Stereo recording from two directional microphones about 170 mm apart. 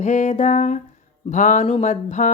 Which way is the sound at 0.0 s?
45° left (ahead or behind).